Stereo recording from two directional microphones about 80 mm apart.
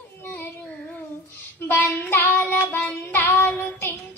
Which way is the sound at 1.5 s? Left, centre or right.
Left.